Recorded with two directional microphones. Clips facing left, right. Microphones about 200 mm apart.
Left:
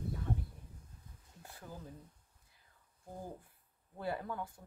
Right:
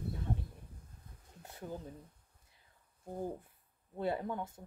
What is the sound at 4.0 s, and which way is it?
Speech, 25° right (ahead or behind).